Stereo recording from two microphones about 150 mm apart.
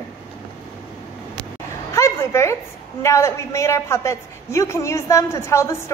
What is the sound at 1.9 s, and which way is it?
A woman's voice, 20° left (ahead or behind).